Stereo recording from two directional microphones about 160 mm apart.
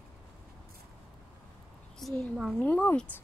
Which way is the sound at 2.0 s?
Centre (ahead or behind).